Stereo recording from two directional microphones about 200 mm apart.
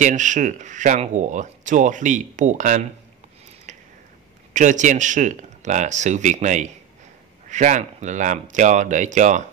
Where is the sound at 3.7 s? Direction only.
40° right (ahead or behind).